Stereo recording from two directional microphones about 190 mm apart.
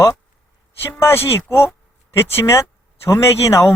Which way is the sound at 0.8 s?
10° left (ahead or behind).